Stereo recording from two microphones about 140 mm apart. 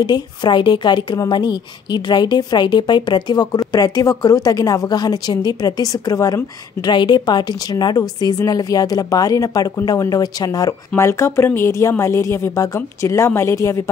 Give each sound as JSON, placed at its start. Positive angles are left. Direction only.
{"t": 0.0, "sound": "a woman's voice", "side_deg": 30}